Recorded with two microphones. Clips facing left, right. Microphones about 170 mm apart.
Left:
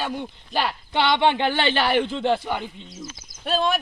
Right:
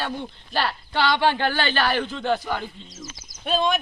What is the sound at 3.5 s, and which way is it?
Speech, 5° left (ahead or behind).